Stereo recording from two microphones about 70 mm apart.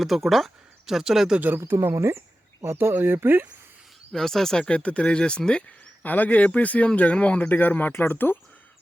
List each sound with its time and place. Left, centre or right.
0.0 s speech: centre
1.4 s speech: right
1.6 s speech: right
4.1 s speech: centre
6.0 s speech: left